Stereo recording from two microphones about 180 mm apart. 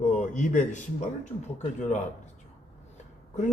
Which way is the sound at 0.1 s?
40° left (ahead or behind).